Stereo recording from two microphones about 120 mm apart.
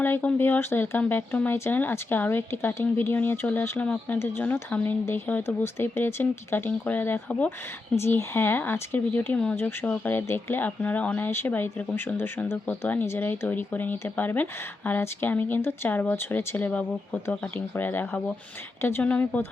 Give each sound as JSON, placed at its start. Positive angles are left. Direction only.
{"t": 0.0, "sound": "speech", "side_deg": 15}